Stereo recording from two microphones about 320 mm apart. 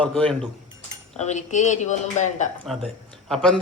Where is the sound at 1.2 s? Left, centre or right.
Left.